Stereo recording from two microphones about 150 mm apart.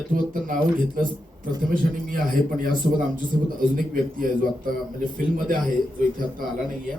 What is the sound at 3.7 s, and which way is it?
Speech, 75° right (ahead or behind).